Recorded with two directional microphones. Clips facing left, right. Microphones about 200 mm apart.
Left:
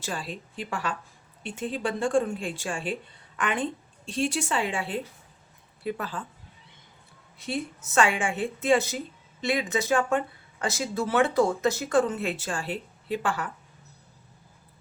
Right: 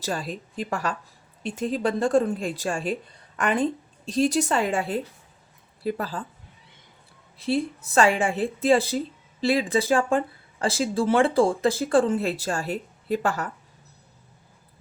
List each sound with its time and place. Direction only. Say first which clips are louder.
0.0 s speech: right 5 dB; 40° right (ahead or behind)
7.3 s speech: right 7 dB; 35° right (ahead or behind)